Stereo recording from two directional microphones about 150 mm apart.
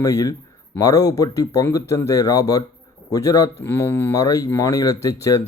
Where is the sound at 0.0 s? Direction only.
20° left (ahead or behind).